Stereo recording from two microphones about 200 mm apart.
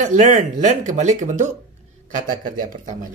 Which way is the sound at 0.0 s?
35° right (ahead or behind).